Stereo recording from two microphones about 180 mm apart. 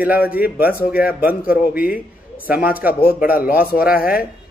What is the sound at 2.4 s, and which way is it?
Speech, 10° right (ahead or behind).